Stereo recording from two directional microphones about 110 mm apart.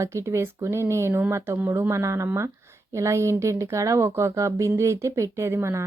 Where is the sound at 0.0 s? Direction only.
25° right (ahead or behind).